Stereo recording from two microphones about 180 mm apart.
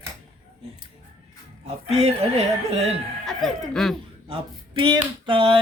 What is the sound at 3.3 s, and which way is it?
Speech, centre (ahead or behind).